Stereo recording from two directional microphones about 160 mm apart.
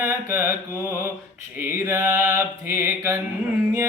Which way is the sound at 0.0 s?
20° right (ahead or behind).